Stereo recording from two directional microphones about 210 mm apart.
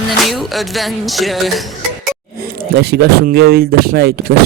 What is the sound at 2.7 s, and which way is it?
Speech, 50° right (ahead or behind).